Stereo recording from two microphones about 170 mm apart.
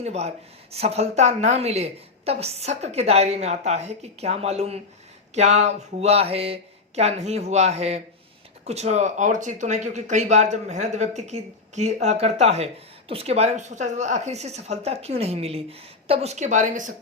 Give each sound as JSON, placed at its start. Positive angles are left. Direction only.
{"t": 0.0, "sound": "speech", "side_deg": -40}